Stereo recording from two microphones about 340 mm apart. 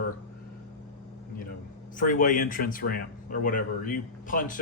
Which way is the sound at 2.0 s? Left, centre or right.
Left.